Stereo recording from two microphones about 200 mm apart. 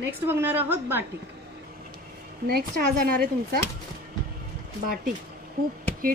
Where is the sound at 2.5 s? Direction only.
50° right (ahead or behind).